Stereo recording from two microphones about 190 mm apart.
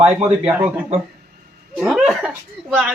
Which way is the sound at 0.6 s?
10° right (ahead or behind).